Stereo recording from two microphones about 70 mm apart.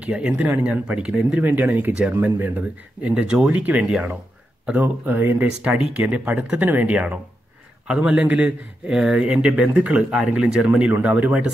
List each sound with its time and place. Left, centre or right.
0.0 s speech: centre
1.4 s speech: right
5.6 s speech: centre